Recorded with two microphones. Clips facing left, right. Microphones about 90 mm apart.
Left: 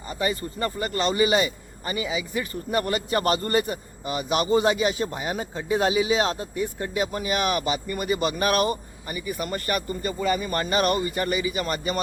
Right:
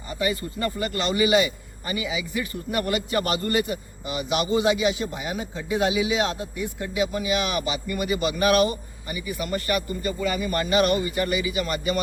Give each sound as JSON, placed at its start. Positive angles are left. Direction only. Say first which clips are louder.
{"t": 0.1, "sound": "a man's voice", "louder": "even", "side_deg": 35}